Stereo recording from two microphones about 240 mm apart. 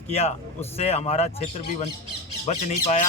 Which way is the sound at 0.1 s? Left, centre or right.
Left.